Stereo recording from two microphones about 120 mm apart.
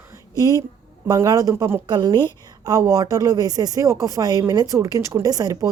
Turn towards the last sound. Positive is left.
turn(degrees=-30)  # may be behind; listen again after turning